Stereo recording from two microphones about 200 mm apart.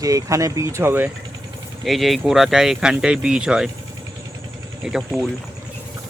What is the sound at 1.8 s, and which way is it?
Speech, centre (ahead or behind).